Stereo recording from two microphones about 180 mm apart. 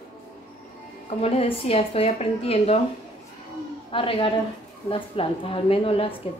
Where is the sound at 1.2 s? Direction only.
35° left (ahead or behind).